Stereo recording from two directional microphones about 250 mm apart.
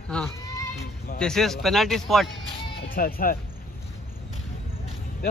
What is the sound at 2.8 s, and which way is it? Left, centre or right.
Speech, left.